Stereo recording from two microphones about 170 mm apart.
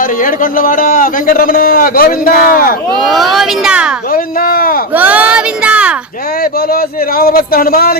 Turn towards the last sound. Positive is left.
turn(degrees=60)  # may be behind; listen again after turning